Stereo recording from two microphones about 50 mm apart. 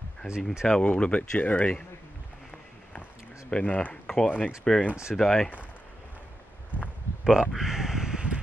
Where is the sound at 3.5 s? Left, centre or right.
Left.